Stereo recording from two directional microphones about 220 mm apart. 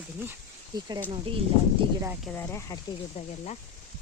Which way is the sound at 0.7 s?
20° right (ahead or behind).